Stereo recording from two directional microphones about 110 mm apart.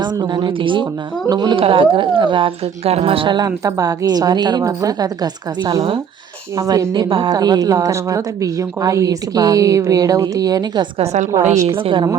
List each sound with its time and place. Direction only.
0.0 s speech: 40° right (ahead or behind)
1.5 s speech: 55° right (ahead or behind)
2.8 s speech: 60° right (ahead or behind); by 10.8 s 40° right (ahead or behind)
10.9 s a woman's voice: 80° right
11.5 s a woman's voice: 30° right (ahead or behind)
11.8 s speech: 50° right (ahead or behind)